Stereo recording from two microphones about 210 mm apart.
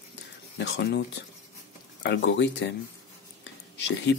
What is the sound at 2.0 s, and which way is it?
Speech, 55° left (ahead or behind).